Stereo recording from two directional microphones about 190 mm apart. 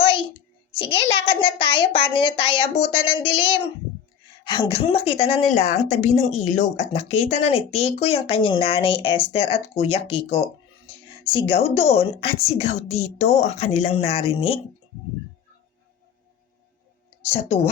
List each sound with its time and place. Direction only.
0.0 s a sound: 30° left (ahead or behind)
0.8 s a child's voice: 30° left (ahead or behind)
17.2 s speech: 30° left (ahead or behind)